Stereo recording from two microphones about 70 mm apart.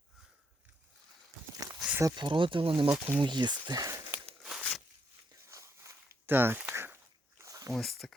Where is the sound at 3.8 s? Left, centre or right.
Right.